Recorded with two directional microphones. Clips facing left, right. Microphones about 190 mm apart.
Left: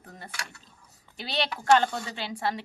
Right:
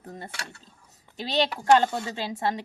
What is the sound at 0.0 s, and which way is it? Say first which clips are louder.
Speech: right 4 dB; 25° right (ahead or behind).